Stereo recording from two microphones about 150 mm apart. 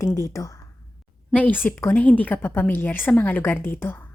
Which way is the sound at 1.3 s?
10° left (ahead or behind).